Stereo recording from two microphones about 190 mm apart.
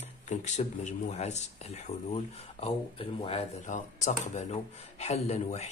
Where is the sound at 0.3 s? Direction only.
40° left (ahead or behind).